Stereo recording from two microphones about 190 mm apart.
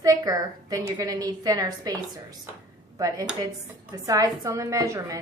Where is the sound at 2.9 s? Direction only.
20° right (ahead or behind).